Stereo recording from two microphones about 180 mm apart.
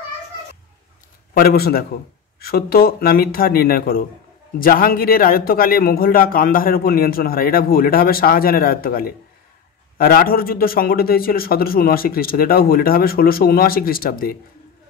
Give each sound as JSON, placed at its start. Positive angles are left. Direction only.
{"t": 1.3, "sound": "a man's voice", "side_deg": 60}